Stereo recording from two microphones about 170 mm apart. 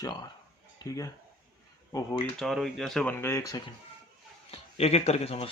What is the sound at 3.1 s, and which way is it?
Speech, 15° left (ahead or behind).